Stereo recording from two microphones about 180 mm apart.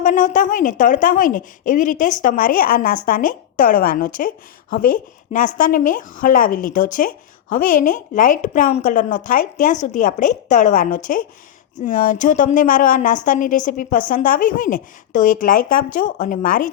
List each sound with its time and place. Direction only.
0.0 s a woman's voice: 45° left (ahead or behind)